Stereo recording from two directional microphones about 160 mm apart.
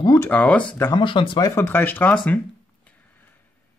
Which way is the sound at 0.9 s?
30° left (ahead or behind).